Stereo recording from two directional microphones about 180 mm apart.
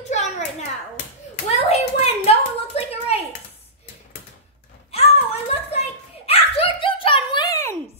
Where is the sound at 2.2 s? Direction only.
35° left (ahead or behind).